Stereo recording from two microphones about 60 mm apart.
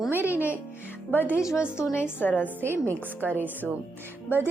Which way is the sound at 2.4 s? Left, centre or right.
Right.